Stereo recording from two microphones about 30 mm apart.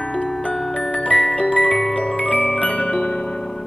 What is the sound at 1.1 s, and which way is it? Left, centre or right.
Music, left.